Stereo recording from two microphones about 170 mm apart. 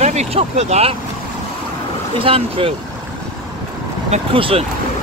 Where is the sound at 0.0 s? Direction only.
40° right (ahead or behind).